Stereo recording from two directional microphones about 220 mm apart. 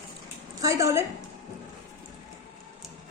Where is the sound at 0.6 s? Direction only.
15° right (ahead or behind).